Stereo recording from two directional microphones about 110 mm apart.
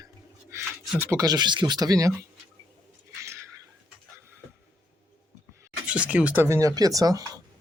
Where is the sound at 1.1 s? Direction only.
35° right (ahead or behind).